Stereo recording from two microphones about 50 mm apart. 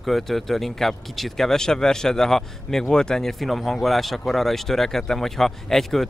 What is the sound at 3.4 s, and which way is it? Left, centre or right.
Speech, centre.